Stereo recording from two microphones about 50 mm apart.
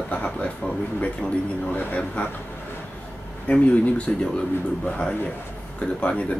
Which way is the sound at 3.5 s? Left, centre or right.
Left.